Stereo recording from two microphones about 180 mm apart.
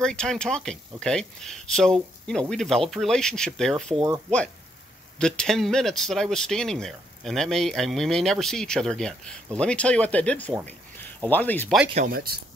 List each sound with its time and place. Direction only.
0.0 s speech: 5° left (ahead or behind)
5.2 s speech: 5° left (ahead or behind)
11.9 s speech: 50° right (ahead or behind)